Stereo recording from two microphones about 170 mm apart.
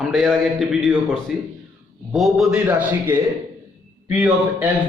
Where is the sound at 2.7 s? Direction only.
15° right (ahead or behind).